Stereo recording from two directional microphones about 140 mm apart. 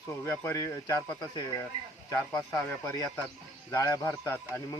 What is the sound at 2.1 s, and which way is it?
Speech, 25° left (ahead or behind).